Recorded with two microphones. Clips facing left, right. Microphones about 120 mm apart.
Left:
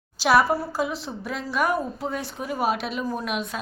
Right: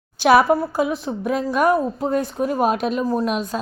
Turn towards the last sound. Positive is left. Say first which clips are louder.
# right 7 dB
turn(degrees=-35)  # may be behind; listen again after turning